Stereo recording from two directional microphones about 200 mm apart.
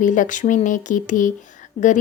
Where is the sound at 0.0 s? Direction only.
40° left (ahead or behind).